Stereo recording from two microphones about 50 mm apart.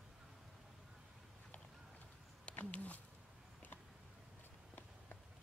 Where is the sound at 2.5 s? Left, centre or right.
Left.